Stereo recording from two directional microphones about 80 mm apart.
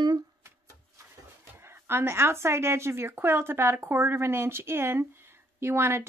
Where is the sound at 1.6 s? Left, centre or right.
Right.